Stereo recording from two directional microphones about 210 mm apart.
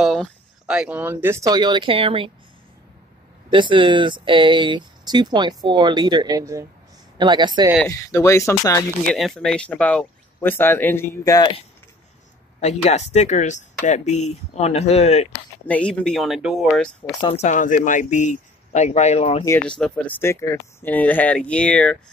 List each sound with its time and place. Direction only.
0.0 s speech: centre (ahead or behind); by 2.3 s 25° right (ahead or behind)
3.4 s speech: 20° right (ahead or behind)
7.9 s speech: 15° left (ahead or behind)
9.1 s speech: centre (ahead or behind); by 15.2 s 30° left (ahead or behind)
15.6 s speech: 5° left (ahead or behind)
17.2 s speech: 30° left (ahead or behind)
19.4 s speech: 10° left (ahead or behind)